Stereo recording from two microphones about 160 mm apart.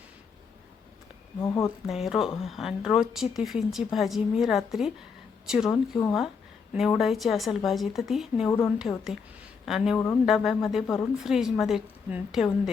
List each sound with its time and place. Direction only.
1.4 s speech: 20° left (ahead or behind)
1.9 s speech: centre (ahead or behind)